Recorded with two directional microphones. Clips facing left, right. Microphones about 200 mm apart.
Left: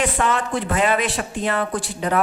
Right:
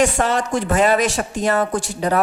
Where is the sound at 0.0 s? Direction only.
40° right (ahead or behind).